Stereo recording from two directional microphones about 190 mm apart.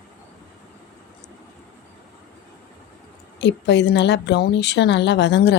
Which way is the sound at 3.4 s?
65° left (ahead or behind).